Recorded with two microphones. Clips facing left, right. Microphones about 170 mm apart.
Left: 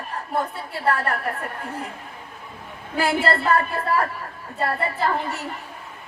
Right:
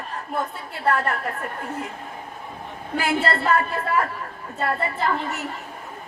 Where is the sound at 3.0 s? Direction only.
35° left (ahead or behind).